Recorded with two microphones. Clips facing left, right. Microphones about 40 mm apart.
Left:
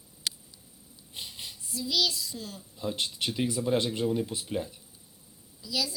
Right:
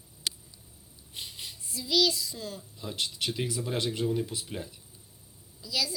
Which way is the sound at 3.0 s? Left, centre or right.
Left.